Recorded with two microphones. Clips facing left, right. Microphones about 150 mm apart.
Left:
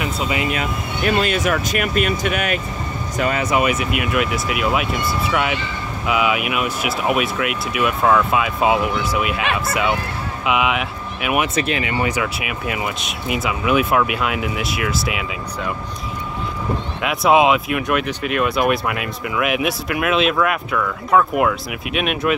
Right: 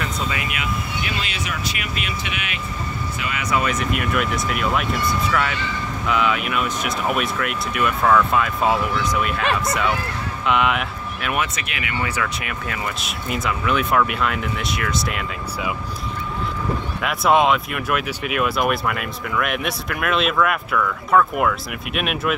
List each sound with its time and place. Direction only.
0.0 s speech: 20° left (ahead or behind)
0.5 s speech: 45° left (ahead or behind)
3.4 s speech: 20° left (ahead or behind)
3.7 s speech: 5° left (ahead or behind)
11.4 s speech: 30° left (ahead or behind)
12.1 s speech: 10° left (ahead or behind)
17.0 s speech: centre (ahead or behind)